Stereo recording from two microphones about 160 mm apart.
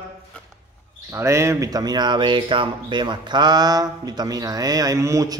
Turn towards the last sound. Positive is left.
turn(degrees=-20)  # may be behind; listen again after turning